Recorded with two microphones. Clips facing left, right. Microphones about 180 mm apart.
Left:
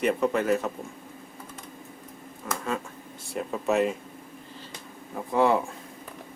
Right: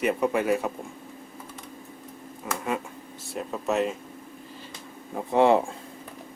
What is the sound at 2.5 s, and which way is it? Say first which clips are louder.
Speech: right 1 dB; 15° right (ahead or behind).